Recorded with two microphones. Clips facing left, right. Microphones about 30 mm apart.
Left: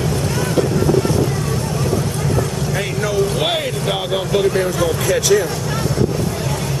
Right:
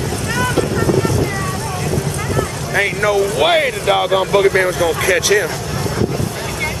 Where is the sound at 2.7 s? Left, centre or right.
Right.